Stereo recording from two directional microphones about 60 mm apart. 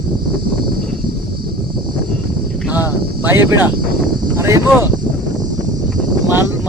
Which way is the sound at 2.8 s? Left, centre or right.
Right.